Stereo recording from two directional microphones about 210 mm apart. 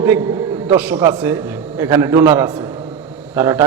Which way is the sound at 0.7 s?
5° right (ahead or behind).